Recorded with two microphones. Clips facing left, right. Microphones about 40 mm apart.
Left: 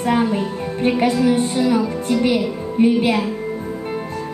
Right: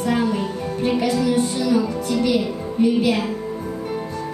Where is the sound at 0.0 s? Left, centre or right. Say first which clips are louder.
Left 2 dB; left.